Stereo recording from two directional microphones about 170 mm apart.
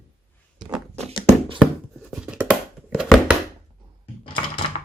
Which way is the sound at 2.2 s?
5° right (ahead or behind).